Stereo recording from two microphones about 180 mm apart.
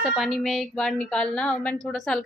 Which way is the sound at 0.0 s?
Centre (ahead or behind).